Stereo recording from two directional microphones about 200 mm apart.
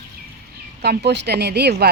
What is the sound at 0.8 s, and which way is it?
A woman's voice, 55° right (ahead or behind).